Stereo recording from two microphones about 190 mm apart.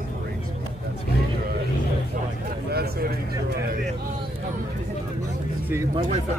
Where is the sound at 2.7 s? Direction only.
55° right (ahead or behind).